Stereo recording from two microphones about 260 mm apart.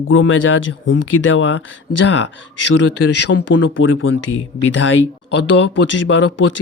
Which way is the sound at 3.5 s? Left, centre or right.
Left.